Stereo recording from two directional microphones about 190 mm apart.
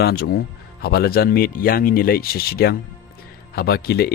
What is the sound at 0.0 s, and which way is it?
Speech, 55° left (ahead or behind).